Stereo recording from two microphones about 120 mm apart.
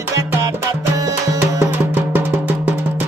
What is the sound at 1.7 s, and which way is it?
Music, 15° right (ahead or behind).